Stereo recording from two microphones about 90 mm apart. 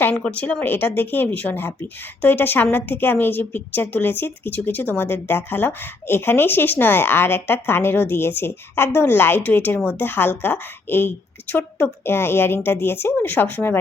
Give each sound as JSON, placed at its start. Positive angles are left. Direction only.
{"t": 0.2, "sound": "a woman's voice", "side_deg": 15}